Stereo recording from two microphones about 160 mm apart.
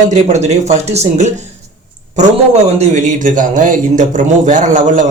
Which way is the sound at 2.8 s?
50° right (ahead or behind).